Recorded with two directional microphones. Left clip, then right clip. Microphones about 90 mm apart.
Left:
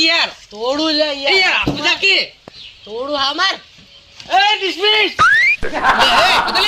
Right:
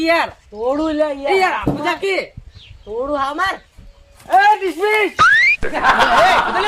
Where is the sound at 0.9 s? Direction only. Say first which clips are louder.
Left 2 dB; 70° right (ahead or behind).